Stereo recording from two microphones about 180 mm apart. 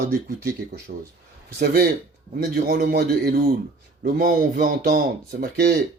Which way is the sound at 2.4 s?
60° right (ahead or behind).